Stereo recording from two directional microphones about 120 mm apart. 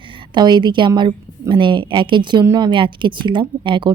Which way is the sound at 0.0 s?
45° right (ahead or behind).